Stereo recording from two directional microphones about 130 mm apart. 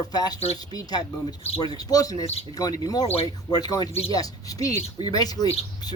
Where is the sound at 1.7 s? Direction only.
30° left (ahead or behind).